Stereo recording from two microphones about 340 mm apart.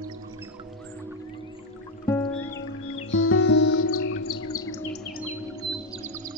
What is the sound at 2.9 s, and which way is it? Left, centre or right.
Music, left.